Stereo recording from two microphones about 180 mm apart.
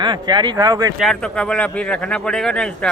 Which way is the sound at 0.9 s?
Centre (ahead or behind).